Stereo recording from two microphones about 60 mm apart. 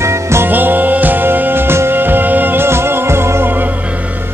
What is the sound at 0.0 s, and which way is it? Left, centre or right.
Music, right.